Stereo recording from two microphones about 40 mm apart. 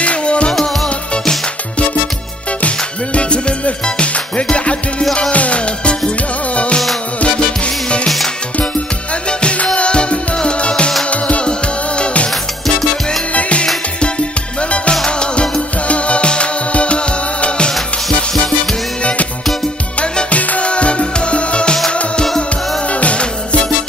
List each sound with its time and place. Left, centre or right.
0.0 s music: left
3.2 s music: left
9.4 s music: left
13.3 s music: left
20.2 s music: left
22.2 s music: centre
22.8 s music: left